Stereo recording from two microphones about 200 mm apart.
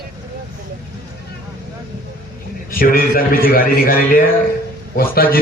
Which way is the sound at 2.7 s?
45° left (ahead or behind).